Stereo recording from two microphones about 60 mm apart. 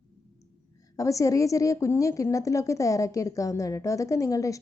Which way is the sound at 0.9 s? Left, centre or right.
Left.